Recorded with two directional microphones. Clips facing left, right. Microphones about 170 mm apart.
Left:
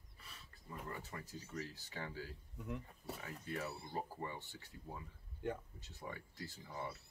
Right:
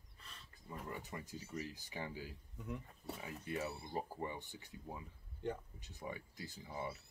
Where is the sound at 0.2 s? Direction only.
5° left (ahead or behind).